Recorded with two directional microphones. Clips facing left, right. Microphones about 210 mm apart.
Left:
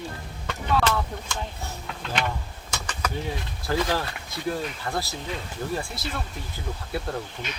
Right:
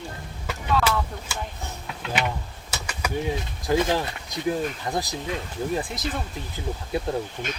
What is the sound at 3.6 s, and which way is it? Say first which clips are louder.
Speech: right 3 dB; 20° right (ahead or behind).